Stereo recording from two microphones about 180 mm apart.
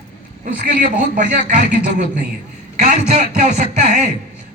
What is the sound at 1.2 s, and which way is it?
Speech, 70° right (ahead or behind).